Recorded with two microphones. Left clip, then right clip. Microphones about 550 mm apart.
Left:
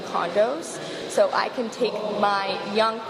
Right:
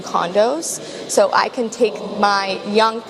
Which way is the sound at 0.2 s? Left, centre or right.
Right.